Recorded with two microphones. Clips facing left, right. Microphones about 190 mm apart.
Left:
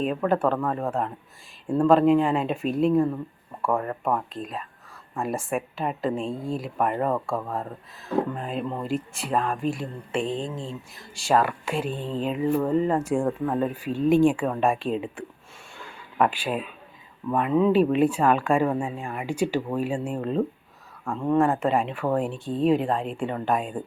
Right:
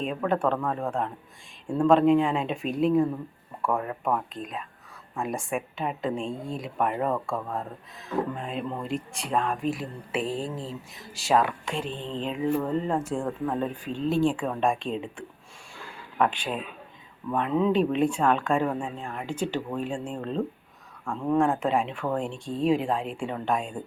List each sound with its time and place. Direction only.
0.0 s speech: centre (ahead or behind)